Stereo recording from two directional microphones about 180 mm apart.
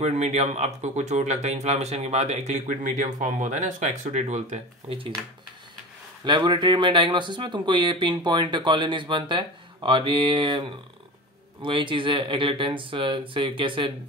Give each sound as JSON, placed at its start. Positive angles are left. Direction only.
{"t": 0.0, "sound": "speech", "side_deg": -35}
{"t": 6.2, "sound": "speech", "side_deg": -25}